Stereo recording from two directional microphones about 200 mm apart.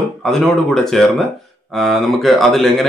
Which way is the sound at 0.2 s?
Centre (ahead or behind).